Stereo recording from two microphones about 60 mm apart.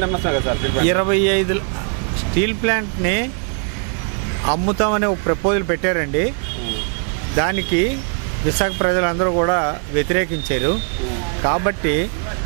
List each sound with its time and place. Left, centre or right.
0.0 s speech: right
4.5 s speech: right
7.3 s speech: right